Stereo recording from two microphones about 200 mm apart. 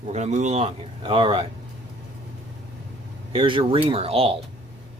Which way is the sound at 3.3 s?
25° right (ahead or behind).